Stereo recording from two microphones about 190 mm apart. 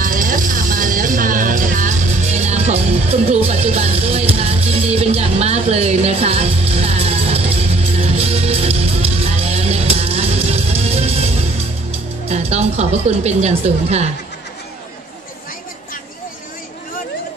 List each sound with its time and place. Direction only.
0.0 s music: 45° right (ahead or behind)